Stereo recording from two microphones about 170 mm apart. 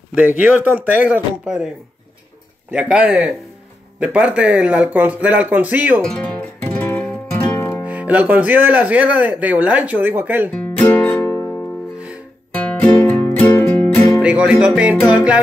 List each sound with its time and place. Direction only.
0.4 s speech: 10° right (ahead or behind)
2.7 s speech: 5° right (ahead or behind)
6.0 s music: 5° left (ahead or behind)
7.8 s speech: 10° right (ahead or behind)
10.5 s music: 10° left (ahead or behind)
14.2 s music: 5° right (ahead or behind)
15.0 s speech: 5° right (ahead or behind)